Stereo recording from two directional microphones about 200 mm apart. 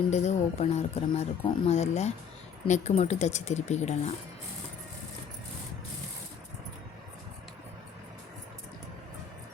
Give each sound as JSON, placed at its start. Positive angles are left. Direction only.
{"t": 0.1, "sound": "speech", "side_deg": 35}